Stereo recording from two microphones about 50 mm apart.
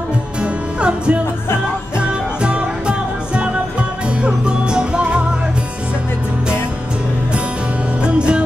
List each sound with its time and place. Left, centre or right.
0.4 s music: right
8.0 s music: right